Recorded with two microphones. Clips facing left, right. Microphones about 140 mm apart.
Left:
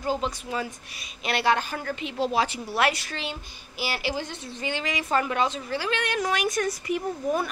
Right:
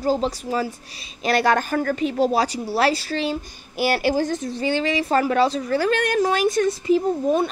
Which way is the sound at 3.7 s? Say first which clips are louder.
Right 9 dB; 50° right (ahead or behind).